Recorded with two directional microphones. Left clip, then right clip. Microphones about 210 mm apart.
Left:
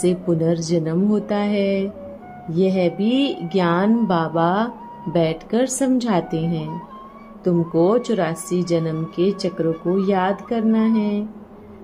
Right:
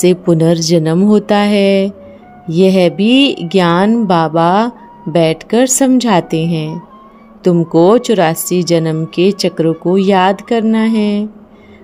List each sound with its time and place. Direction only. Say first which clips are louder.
0.0 s a woman's voice: right 9 dB; 40° right (ahead or behind)
7.4 s a woman's voice: right 9 dB; 45° right (ahead or behind)